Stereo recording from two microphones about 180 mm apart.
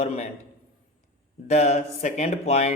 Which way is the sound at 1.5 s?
40° left (ahead or behind).